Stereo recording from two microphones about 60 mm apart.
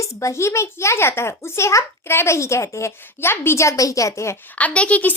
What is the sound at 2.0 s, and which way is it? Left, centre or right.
A child's voice, left.